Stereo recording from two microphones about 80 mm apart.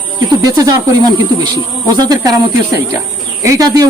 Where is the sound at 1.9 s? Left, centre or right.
Right.